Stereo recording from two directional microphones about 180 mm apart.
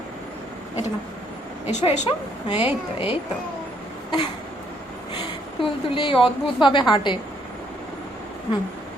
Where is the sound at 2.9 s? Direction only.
30° left (ahead or behind).